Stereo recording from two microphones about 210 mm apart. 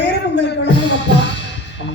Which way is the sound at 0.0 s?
55° left (ahead or behind).